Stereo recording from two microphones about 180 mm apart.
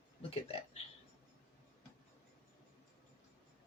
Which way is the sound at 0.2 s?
35° left (ahead or behind).